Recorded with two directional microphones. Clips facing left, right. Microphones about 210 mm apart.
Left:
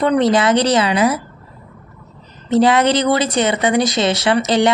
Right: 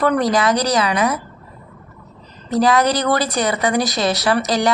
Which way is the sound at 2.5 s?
25° left (ahead or behind).